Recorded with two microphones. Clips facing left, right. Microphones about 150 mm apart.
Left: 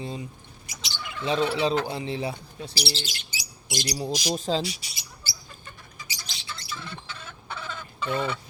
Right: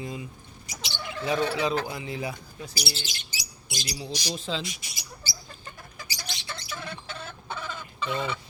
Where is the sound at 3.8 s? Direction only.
40° left (ahead or behind).